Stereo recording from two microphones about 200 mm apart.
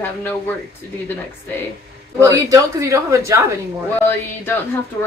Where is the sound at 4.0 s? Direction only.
10° left (ahead or behind).